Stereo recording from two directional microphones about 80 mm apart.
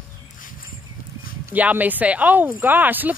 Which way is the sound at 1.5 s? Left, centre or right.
Right.